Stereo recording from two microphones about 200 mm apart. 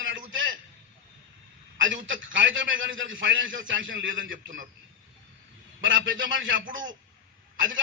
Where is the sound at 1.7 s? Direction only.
70° right (ahead or behind).